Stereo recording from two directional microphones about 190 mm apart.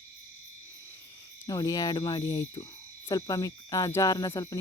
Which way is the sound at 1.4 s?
20° left (ahead or behind).